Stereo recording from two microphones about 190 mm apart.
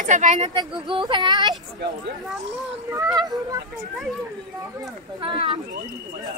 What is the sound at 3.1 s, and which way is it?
Speech, 20° right (ahead or behind).